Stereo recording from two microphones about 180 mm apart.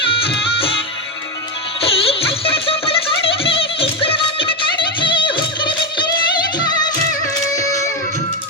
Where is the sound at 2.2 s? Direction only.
30° left (ahead or behind).